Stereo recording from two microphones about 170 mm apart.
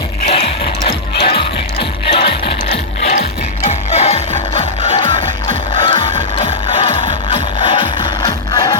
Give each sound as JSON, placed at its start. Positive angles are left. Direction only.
{"t": 0.3, "sound": "music", "side_deg": 30}
{"t": 3.7, "sound": "music", "side_deg": 40}